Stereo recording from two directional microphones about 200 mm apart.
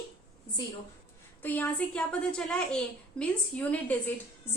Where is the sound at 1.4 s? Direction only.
5° left (ahead or behind).